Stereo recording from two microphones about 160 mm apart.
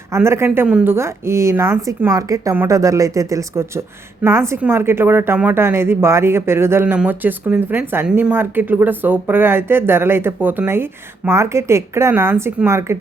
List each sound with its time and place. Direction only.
0.1 s speech: 15° right (ahead or behind)